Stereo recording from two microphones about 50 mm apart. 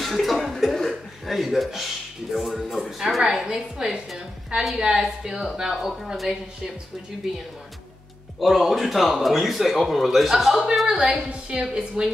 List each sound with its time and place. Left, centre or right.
0.0 s a woman's voice: centre
8.4 s a woman's voice: centre
11.2 s a woman's voice: right